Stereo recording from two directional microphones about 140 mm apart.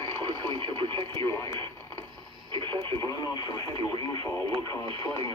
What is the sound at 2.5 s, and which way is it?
Radio, 35° right (ahead or behind).